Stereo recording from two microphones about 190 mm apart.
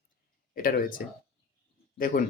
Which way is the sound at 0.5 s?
50° left (ahead or behind).